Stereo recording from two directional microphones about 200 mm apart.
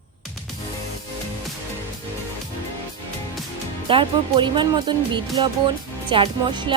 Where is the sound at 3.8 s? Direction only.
25° right (ahead or behind).